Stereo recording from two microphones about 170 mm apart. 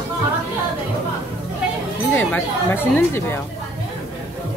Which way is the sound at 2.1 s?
10° left (ahead or behind).